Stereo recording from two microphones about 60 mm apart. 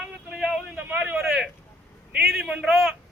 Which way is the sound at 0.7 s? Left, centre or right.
Right.